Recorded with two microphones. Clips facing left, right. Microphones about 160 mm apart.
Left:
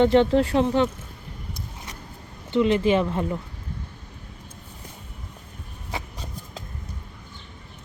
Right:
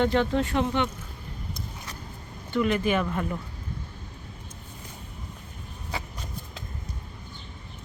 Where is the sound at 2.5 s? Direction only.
25° left (ahead or behind).